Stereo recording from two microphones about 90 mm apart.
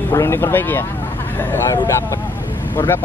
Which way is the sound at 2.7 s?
25° left (ahead or behind).